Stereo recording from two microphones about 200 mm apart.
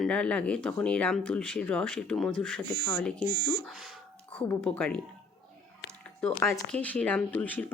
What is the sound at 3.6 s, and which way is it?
A woman's voice, centre (ahead or behind).